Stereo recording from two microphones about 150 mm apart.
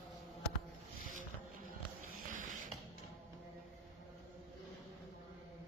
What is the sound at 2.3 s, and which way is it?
Printer, 60° right (ahead or behind).